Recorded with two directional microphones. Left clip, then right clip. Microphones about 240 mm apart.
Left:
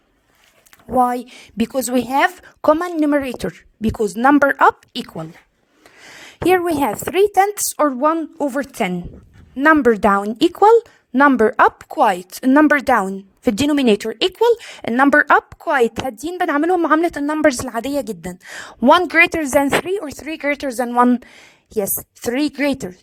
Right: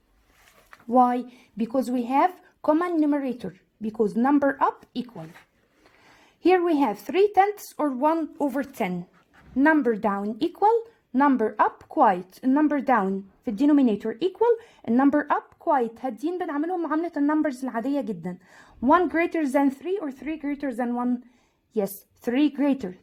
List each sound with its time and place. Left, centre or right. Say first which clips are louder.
0.9 s a woman's voice: left 4 dB; left